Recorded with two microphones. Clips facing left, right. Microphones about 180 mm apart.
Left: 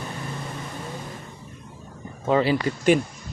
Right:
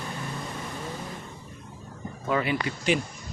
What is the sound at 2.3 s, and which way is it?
Speech, 30° left (ahead or behind).